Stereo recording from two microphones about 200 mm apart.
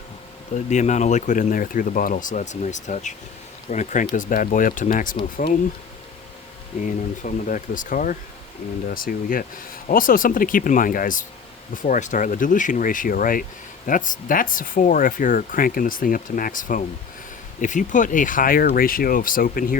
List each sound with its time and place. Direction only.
0.5 s speech: 35° left (ahead or behind)
6.8 s speech: 40° left (ahead or behind)